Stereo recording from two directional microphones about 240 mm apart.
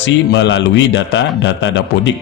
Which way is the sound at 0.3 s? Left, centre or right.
Left.